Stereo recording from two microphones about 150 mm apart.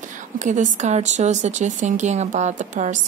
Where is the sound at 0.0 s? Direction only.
55° right (ahead or behind).